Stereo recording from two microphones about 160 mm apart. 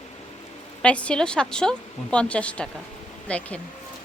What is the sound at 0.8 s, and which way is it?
Speech, 5° left (ahead or behind).